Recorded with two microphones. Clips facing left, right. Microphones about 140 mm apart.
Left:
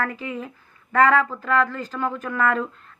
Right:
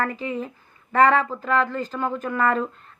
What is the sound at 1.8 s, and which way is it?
Speech, centre (ahead or behind).